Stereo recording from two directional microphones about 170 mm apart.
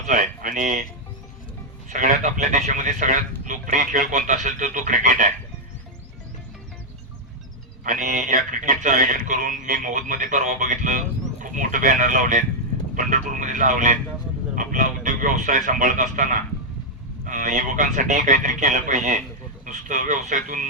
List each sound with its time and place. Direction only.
0.1 s speech: 50° right (ahead or behind)
1.9 s speech: 45° right (ahead or behind)
7.9 s speech: 50° right (ahead or behind)